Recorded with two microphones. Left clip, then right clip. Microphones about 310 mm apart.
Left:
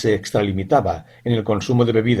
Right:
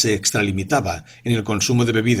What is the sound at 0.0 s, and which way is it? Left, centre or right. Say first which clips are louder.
Speech: even; right.